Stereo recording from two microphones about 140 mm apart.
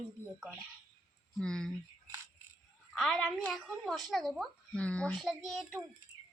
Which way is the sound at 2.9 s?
5° left (ahead or behind).